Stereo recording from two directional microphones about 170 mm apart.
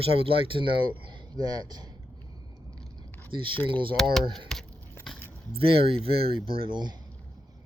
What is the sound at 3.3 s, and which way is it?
Speech, 30° right (ahead or behind).